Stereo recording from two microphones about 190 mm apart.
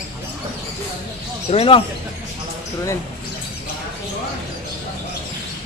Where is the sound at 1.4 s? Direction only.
30° left (ahead or behind).